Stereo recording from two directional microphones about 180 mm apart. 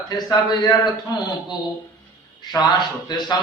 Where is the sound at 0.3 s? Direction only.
25° left (ahead or behind).